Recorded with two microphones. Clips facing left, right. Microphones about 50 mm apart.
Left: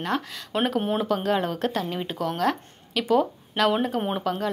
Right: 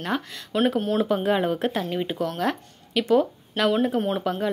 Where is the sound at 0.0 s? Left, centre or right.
Centre.